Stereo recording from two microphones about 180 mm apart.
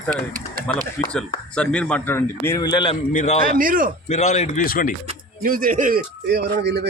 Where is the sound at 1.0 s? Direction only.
5° left (ahead or behind); by 2.9 s 25° left (ahead or behind).